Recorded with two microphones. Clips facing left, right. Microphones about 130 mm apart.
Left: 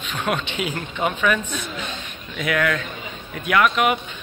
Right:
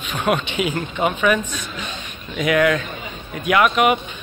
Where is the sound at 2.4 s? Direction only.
15° right (ahead or behind).